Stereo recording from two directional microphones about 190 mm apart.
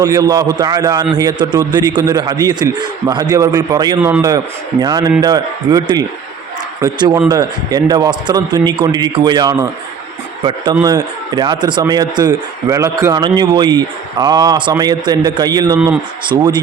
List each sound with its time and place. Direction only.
0.0 s a man's voice: 20° right (ahead or behind)
10.8 s a man's voice: 20° right (ahead or behind)